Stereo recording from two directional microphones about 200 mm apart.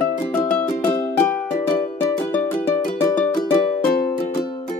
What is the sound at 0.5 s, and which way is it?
Music, 5° left (ahead or behind).